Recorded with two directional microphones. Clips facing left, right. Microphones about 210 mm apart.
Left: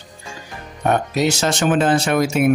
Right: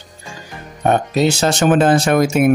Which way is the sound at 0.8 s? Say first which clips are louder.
Right 3 dB; 30° right (ahead or behind).